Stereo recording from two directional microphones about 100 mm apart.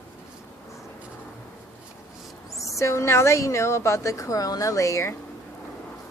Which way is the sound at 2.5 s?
30° left (ahead or behind).